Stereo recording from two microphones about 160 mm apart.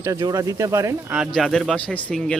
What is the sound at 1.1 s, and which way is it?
Speech, centre (ahead or behind).